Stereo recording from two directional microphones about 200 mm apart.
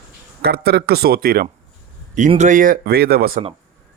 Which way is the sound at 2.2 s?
35° right (ahead or behind).